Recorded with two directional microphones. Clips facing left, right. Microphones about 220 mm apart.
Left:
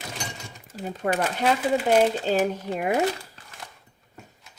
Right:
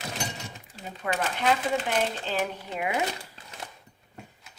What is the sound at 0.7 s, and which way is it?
A woman's voice, 45° left (ahead or behind).